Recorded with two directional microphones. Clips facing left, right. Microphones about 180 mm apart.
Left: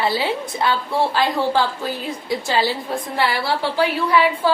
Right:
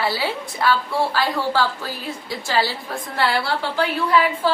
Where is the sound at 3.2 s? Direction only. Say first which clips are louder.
Even; 10° left (ahead or behind).